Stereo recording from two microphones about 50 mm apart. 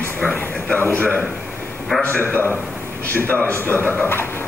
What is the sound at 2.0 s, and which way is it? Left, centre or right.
A man's voice, left.